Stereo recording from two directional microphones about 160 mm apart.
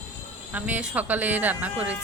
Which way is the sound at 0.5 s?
10° right (ahead or behind).